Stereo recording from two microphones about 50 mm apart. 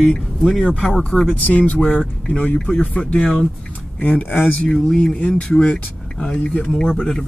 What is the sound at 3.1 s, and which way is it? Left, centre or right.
Speech, centre.